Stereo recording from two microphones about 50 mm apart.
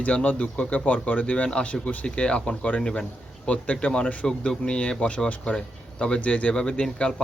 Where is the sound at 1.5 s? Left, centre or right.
Centre.